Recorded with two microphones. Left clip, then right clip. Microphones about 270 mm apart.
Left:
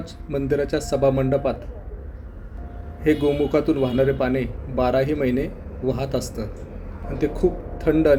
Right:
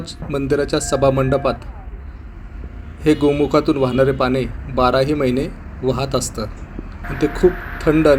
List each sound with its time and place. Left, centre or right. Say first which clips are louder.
0.0 s a man's voice: right 4 dB; centre
3.0 s a man's voice: right 4 dB; centre